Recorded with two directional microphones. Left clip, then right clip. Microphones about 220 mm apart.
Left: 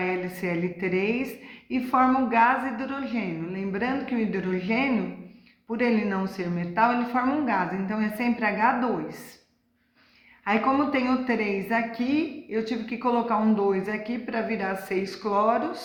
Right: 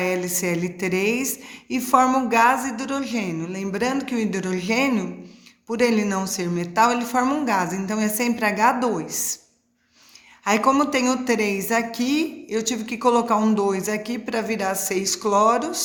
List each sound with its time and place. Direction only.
0.0 s a woman's voice: 50° right (ahead or behind)
10.4 s a woman's voice: 50° right (ahead or behind)